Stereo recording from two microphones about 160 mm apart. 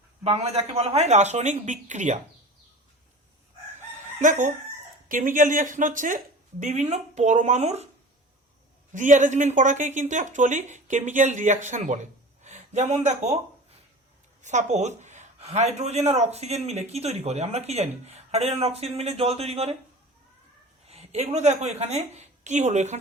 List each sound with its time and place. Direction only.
0.3 s speech: 40° right (ahead or behind)
4.2 s chicken: 55° right (ahead or behind)
5.0 s speech: 55° right (ahead or behind)
8.9 s speech: 50° right (ahead or behind)
14.4 s speech: 45° right (ahead or behind)
20.8 s a woman's voice: 40° right (ahead or behind)